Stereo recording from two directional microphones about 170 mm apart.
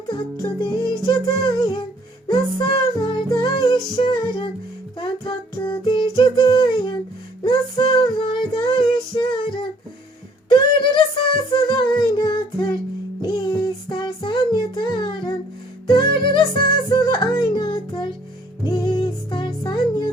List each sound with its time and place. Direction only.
0.1 s music: 25° left (ahead or behind)
7.4 s child singing: 25° left (ahead or behind)
11.5 s female singing: 25° left (ahead or behind)
13.2 s child singing: 25° left (ahead or behind)
15.9 s music: 30° left (ahead or behind)